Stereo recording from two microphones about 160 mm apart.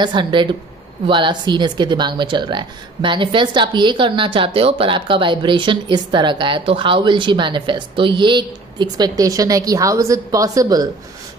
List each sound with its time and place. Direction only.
0.0 s speech: 30° right (ahead or behind)